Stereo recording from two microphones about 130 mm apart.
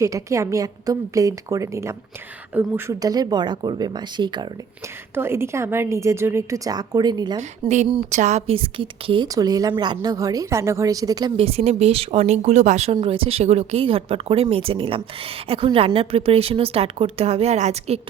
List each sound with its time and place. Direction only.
0.0 s a woman's voice: 25° right (ahead or behind)
3.0 s speech: 30° right (ahead or behind)
5.1 s a woman's voice: 20° right (ahead or behind); by 7.8 s 35° right (ahead or behind)
8.1 s a woman's voice: 65° right (ahead or behind); by 9.3 s 40° right (ahead or behind)
9.3 s a woman's voice: 30° right (ahead or behind)
11.3 s speech: 50° right (ahead or behind)
13.0 s a woman's voice: 45° right (ahead or behind)